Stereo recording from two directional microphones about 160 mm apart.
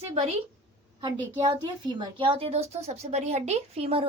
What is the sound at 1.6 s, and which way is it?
A woman's voice, 30° right (ahead or behind).